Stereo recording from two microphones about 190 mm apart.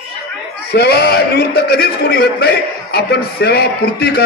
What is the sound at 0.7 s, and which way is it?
A man's voice, 55° left (ahead or behind).